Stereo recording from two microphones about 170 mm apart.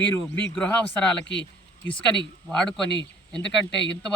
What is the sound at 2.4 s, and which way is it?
Speech, 5° left (ahead or behind).